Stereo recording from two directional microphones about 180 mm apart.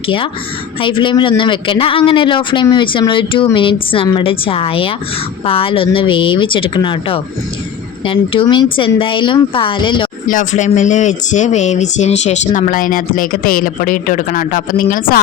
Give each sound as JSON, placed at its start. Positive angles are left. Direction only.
{"t": 0.8, "sound": "a man's voice", "side_deg": 30}
{"t": 10.2, "sound": "speech", "side_deg": 45}